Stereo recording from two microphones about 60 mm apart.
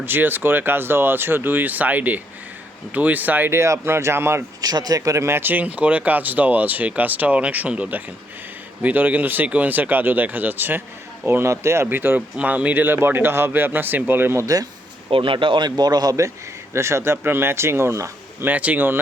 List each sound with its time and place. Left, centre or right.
0.0 s speech: right
3.5 s speech: right
4.6 s a man's voice: right
5.2 s speech: right
11.9 s speech: right
12.4 s speech: right
14.4 s a man's voice: right
15.9 s a man's voice: right
16.7 s speech: right
18.4 s speech: right